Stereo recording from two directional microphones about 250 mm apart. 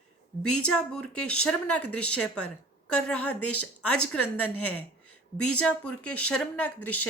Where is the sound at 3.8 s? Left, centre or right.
Left.